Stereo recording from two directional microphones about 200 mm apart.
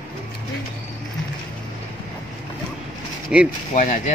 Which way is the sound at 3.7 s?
35° left (ahead or behind).